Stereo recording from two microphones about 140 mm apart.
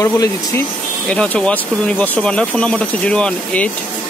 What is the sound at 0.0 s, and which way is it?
Speech, 20° left (ahead or behind).